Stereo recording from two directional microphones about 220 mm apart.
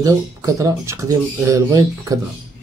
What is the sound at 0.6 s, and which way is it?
Speech, 15° right (ahead or behind).